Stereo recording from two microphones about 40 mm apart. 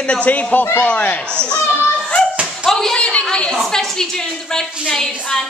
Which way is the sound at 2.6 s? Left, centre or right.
Centre.